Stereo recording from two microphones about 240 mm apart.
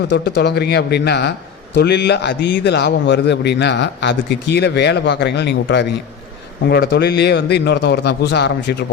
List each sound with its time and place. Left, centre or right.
0.1 s a man's voice: left